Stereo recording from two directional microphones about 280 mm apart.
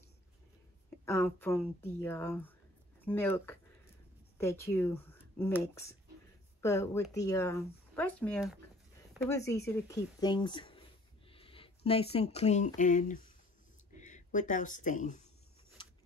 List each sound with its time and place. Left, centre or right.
0.8 s a woman's voice: centre; by 15.2 s left